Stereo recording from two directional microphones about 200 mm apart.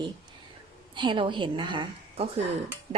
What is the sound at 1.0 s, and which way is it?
A woman's voice, 25° right (ahead or behind).